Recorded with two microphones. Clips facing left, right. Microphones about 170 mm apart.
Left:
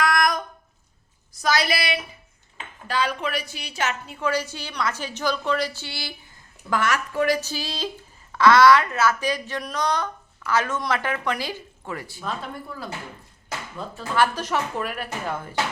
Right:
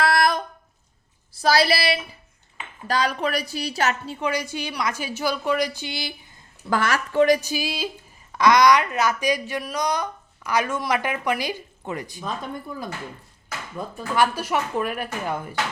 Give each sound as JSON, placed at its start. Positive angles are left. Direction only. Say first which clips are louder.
{"t": 0.0, "sound": "a sound", "louder": "right 2 dB", "side_deg": -30}
{"t": 1.3, "sound": "a woman's voice", "louder": "right 4 dB", "side_deg": -30}
{"t": 4.2, "sound": "a woman's voice", "louder": "left 3 dB", "side_deg": -15}
{"t": 6.7, "sound": "a woman's voice", "louder": "right 1 dB", "side_deg": -35}
{"t": 7.4, "sound": "a woman's voice", "louder": "right 3 dB", "side_deg": -10}
{"t": 13.7, "sound": "a woman's voice", "louder": "right 1 dB", "side_deg": -15}